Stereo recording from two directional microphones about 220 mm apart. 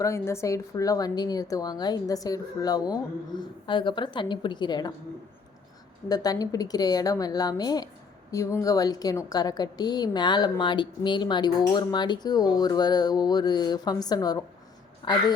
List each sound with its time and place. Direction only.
0.0 s a woman's voice: 10° left (ahead or behind)
6.1 s a woman's voice: 15° left (ahead or behind)